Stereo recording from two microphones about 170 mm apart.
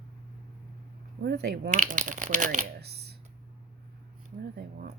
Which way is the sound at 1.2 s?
75° right (ahead or behind).